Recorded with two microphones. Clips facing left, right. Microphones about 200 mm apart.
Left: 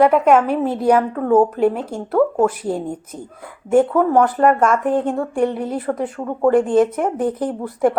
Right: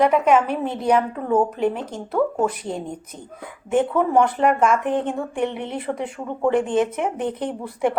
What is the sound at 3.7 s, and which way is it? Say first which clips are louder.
Speech: left 4 dB; 45° left (ahead or behind).